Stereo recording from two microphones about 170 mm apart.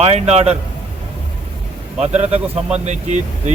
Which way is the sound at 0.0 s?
35° right (ahead or behind).